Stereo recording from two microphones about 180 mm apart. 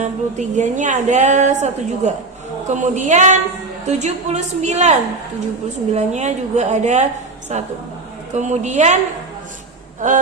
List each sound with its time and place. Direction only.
0.0 s a woman's voice: 40° right (ahead or behind)
10.0 s speech: 45° right (ahead or behind)